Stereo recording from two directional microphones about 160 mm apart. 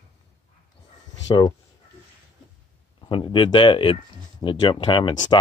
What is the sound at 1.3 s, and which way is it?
Speech, 25° left (ahead or behind).